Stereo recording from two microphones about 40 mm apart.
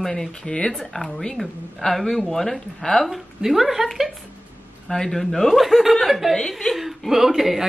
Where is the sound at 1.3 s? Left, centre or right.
Centre.